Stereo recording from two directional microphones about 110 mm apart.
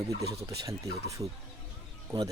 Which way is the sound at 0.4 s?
30° right (ahead or behind).